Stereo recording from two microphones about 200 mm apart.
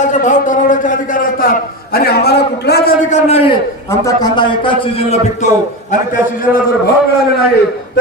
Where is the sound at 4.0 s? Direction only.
20° left (ahead or behind).